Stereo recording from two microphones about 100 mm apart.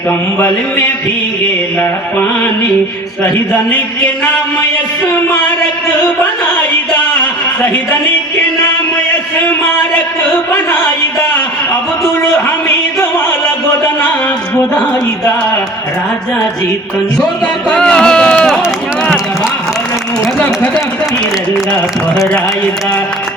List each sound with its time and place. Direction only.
0.3 s a sound: 20° left (ahead or behind)
17.2 s speech: 10° left (ahead or behind)
20.4 s speech: 15° left (ahead or behind)